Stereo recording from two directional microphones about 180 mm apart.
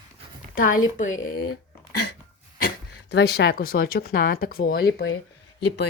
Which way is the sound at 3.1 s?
65° left (ahead or behind).